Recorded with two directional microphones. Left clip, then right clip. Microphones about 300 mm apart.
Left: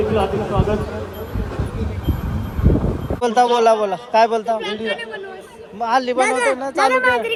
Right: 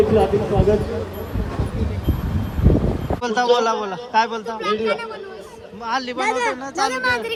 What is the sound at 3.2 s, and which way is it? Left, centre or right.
A man's voice, centre.